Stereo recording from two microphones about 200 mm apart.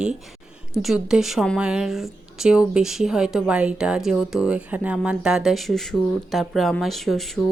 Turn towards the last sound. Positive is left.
turn(degrees=0)  # may be behind; listen again after turning